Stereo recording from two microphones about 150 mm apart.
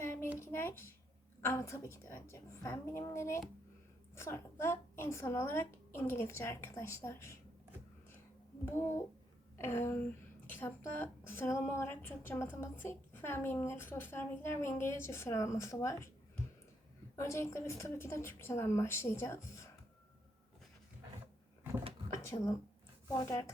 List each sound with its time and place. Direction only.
0.0 s a sound: 15° left (ahead or behind)
1.4 s a woman's voice: 15° left (ahead or behind)
8.6 s a woman's voice: 15° left (ahead or behind)
9.6 s a sound: 15° left (ahead or behind)
10.5 s a woman's voice: 15° left (ahead or behind)
17.2 s a woman's voice: 20° left (ahead or behind)
22.2 s a woman's voice: 20° left (ahead or behind)